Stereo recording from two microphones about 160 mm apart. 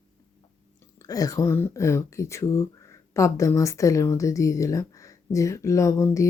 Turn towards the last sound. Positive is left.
turn(degrees=20)  # may be behind; listen again after turning